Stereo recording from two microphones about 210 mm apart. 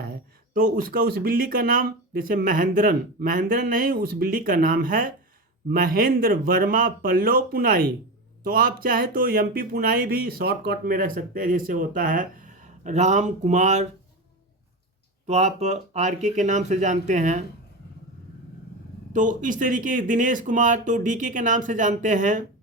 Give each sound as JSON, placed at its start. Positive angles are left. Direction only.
{"t": 0.1, "sound": "speech", "side_deg": -40}
{"t": 15.3, "sound": "speech", "side_deg": -30}
{"t": 19.1, "sound": "speech", "side_deg": -35}